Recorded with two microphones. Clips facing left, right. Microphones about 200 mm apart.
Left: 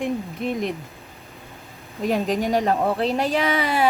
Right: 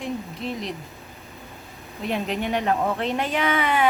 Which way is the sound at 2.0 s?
40° left (ahead or behind).